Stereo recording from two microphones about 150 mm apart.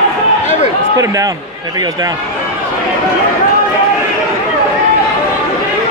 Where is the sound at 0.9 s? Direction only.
20° right (ahead or behind).